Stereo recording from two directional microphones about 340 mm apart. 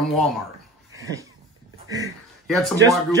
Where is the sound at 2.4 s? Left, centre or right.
Centre.